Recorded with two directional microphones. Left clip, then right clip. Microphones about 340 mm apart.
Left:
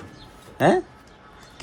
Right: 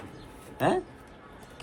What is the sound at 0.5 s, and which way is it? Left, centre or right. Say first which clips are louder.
Speech: left 7 dB; centre.